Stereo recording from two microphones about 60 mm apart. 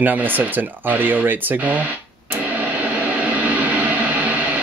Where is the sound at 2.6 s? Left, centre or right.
Right.